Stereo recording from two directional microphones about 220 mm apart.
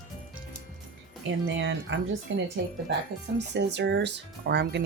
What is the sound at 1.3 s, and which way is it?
Speech, 55° right (ahead or behind).